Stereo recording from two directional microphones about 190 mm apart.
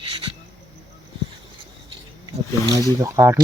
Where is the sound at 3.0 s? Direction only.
15° right (ahead or behind).